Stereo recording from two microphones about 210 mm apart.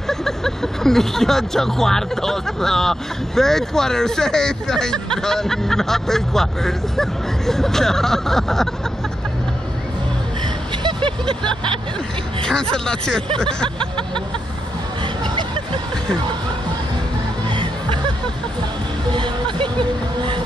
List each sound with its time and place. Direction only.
0.1 s speech: centre (ahead or behind)
10.9 s vehicle: 25° right (ahead or behind)
12.4 s speech: 5° left (ahead or behind)
15.2 s hubbub: 20° right (ahead or behind)
17.5 s music: 25° right (ahead or behind)
19.1 s hubbub: 25° right (ahead or behind)
20.2 s train: 25° right (ahead or behind)